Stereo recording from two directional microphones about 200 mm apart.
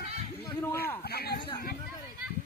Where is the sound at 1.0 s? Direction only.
50° left (ahead or behind).